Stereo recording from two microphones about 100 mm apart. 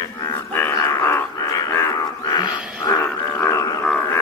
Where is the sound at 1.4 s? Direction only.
35° left (ahead or behind).